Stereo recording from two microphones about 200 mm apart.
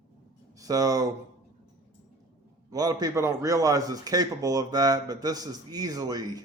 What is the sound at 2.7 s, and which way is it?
A man's voice, 20° right (ahead or behind).